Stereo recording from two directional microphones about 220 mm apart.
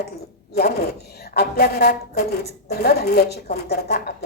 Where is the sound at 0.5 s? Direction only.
45° left (ahead or behind).